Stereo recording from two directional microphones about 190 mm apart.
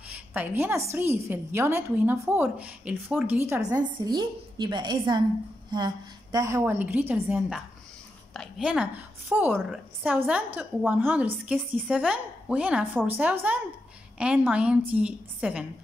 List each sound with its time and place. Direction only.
0.1 s a woman's voice: 10° right (ahead or behind)
5.7 s a sound: 20° right (ahead or behind)
6.3 s a woman's voice: 15° right (ahead or behind)